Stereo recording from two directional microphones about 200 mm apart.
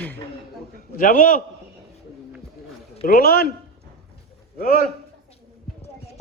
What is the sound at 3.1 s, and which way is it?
Speech, 50° left (ahead or behind).